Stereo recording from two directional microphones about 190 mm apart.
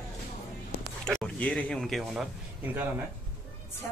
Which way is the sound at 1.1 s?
5° left (ahead or behind).